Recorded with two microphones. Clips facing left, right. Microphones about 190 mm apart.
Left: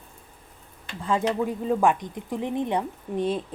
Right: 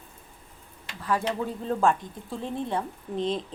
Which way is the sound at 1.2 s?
10° left (ahead or behind).